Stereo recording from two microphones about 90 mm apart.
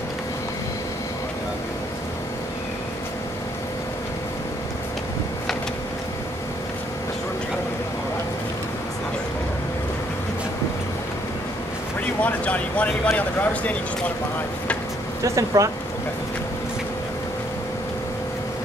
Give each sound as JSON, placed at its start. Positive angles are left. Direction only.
{"t": 12.2, "sound": "speech", "side_deg": 15}
{"t": 15.2, "sound": "speech", "side_deg": -35}